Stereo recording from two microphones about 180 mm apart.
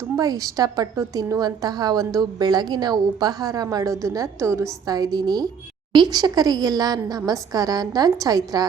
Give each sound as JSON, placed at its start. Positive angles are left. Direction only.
{"t": 0.0, "sound": "a woman's voice", "side_deg": -20}